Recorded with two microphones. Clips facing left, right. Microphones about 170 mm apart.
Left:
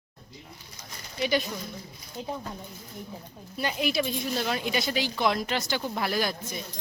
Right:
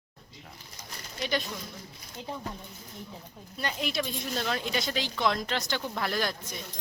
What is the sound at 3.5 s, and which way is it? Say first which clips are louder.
Speech: left 4 dB; 5° left (ahead or behind).